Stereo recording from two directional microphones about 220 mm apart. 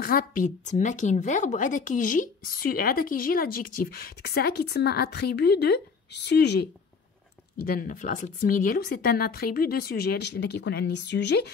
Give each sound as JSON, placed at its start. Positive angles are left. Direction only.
{"t": 0.0, "sound": "a woman's voice", "side_deg": 40}